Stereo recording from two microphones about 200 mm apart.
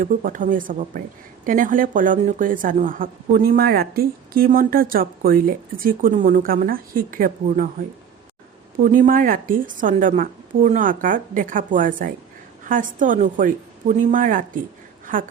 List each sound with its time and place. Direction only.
0.0 s a woman's voice: 40° right (ahead or behind)
8.8 s a woman's voice: 45° right (ahead or behind)